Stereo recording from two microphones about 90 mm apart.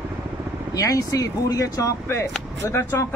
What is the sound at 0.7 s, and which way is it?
Speech, 40° left (ahead or behind).